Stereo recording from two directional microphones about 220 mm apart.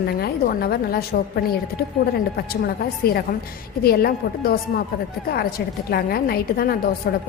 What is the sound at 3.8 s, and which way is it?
A woman's voice, 45° left (ahead or behind).